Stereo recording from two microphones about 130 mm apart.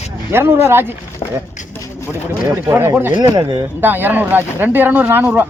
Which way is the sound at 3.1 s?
35° right (ahead or behind).